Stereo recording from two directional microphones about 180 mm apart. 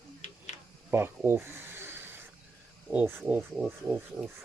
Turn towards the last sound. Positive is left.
turn(degrees=-10)  # may be behind; listen again after turning